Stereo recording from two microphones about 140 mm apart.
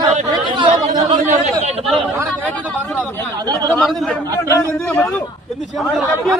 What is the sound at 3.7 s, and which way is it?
Speech, 5° left (ahead or behind).